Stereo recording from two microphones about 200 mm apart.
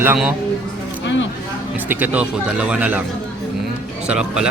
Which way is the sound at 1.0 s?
65° left (ahead or behind).